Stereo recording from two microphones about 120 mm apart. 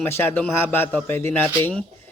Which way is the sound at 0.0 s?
20° left (ahead or behind).